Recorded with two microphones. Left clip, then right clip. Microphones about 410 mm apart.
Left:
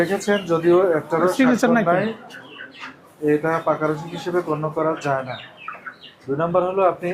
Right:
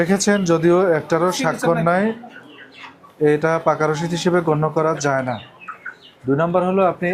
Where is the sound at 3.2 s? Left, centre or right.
Right.